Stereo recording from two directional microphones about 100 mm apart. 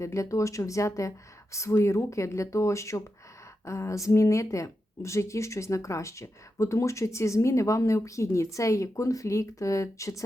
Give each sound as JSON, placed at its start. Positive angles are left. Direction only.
{"t": 0.0, "sound": "speech", "side_deg": 30}